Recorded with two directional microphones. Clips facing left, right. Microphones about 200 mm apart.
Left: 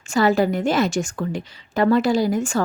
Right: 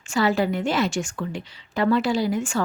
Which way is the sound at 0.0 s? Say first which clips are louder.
Left 4 dB; 45° left (ahead or behind).